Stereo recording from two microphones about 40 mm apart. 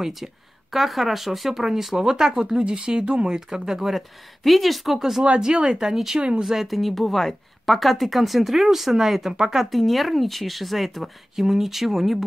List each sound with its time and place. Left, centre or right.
0.0 s speech: centre
4.4 s speech: centre
5.4 s speech: right
5.9 s speech: centre